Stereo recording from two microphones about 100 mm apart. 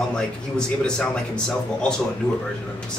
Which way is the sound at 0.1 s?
10° left (ahead or behind).